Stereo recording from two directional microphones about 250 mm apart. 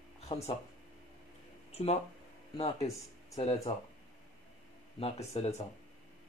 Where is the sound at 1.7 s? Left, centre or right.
Left.